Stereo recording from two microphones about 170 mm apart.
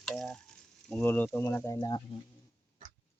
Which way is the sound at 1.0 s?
10° left (ahead or behind).